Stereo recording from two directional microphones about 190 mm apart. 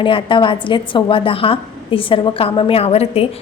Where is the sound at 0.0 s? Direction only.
25° left (ahead or behind).